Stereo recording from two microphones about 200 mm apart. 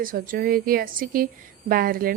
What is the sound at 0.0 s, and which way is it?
Speech, 45° right (ahead or behind).